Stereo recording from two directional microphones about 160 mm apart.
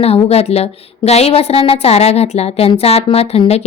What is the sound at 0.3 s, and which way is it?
A woman's voice, 40° left (ahead or behind).